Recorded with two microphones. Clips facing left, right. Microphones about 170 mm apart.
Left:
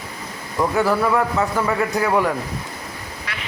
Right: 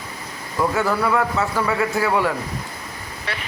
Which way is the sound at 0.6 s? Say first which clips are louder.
Left 2 dB; 15° left (ahead or behind).